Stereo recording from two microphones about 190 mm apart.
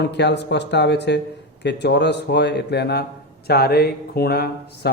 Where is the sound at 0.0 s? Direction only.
65° left (ahead or behind).